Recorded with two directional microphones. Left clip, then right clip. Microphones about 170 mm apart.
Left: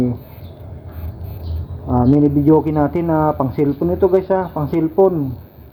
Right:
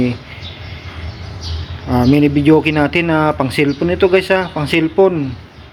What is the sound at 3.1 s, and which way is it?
Speech, 20° right (ahead or behind).